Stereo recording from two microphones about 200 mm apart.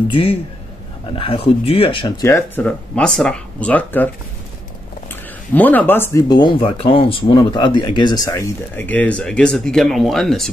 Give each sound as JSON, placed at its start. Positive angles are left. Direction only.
{"t": 0.1, "sound": "speech", "side_deg": 25}